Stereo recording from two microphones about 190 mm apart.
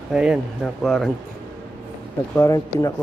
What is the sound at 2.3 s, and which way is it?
Speech, 15° left (ahead or behind).